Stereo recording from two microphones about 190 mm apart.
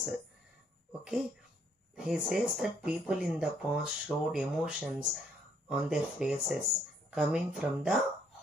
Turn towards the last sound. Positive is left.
turn(degrees=-5)  # may be behind; listen again after turning